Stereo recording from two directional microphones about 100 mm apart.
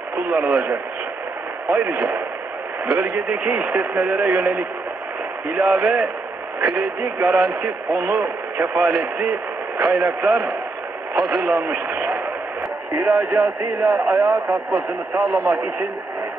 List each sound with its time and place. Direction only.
0.1 s speech: 15° right (ahead or behind)
11.1 s speech: 5° right (ahead or behind)
11.5 s speech: 20° right (ahead or behind); by 14.4 s 35° right (ahead or behind)
15.1 s speech: 25° right (ahead or behind)